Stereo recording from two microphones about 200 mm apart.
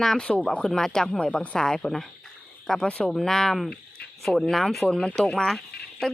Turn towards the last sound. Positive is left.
turn(degrees=0)  # may be behind; listen again after turning